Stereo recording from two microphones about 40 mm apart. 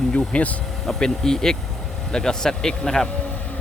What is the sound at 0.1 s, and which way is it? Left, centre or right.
Speech, left.